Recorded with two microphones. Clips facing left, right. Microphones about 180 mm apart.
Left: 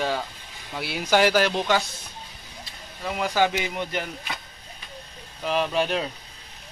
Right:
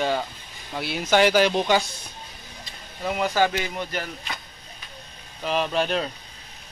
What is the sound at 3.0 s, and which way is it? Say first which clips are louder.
Speech: right 3 dB; 5° right (ahead or behind).